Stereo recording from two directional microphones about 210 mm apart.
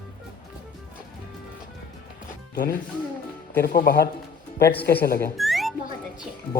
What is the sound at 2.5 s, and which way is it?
Speech, 45° left (ahead or behind).